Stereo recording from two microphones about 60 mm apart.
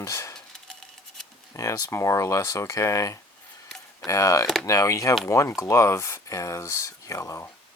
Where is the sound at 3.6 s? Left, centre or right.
Centre.